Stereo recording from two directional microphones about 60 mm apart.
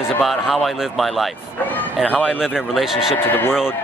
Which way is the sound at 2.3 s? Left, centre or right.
Centre.